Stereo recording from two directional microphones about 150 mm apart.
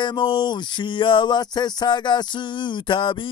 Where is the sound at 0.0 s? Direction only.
35° left (ahead or behind).